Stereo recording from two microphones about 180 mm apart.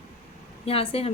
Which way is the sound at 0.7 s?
35° left (ahead or behind).